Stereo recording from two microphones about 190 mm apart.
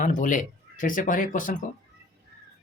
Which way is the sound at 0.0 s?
45° left (ahead or behind).